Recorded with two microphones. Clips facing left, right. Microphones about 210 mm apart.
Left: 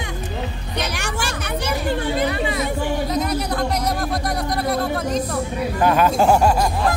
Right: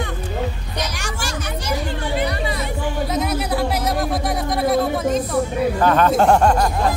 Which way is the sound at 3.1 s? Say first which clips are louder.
Even; 5° right (ahead or behind).